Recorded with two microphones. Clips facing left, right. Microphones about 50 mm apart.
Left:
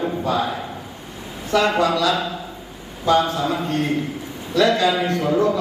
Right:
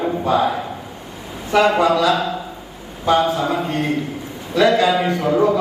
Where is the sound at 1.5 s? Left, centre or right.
Centre.